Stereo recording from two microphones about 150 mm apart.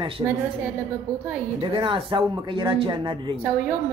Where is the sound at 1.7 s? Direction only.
35° right (ahead or behind).